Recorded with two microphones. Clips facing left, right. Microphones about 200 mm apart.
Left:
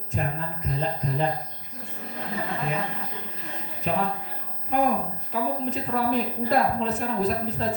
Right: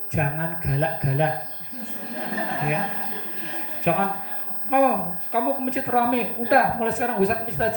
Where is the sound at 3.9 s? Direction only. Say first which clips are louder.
Right 4 dB; 65° right (ahead or behind).